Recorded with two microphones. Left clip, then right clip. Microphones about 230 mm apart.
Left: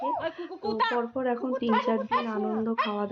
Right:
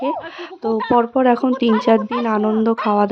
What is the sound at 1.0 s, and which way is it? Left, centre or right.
Speech, right.